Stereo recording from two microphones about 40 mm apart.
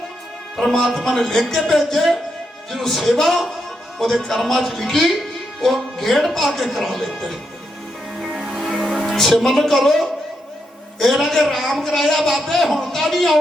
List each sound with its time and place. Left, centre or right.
0.9 s speech: centre
1.1 s speech: centre
8.2 s music: centre
9.1 s speech: centre
11.8 s speech: centre